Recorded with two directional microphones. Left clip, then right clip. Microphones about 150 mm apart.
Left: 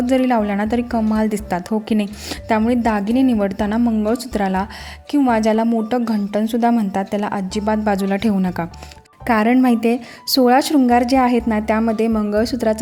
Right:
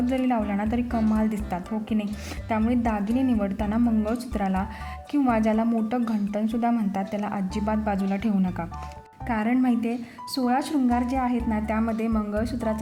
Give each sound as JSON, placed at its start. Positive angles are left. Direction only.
{"t": 0.1, "sound": "a woman's voice", "side_deg": 35}
{"t": 9.2, "sound": "a woman's voice", "side_deg": 50}